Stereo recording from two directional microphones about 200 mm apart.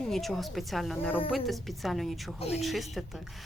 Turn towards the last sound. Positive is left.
turn(degrees=0)  # may be behind; listen again after turning